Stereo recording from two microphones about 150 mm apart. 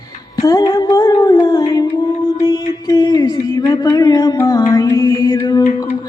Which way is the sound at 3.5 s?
25° left (ahead or behind).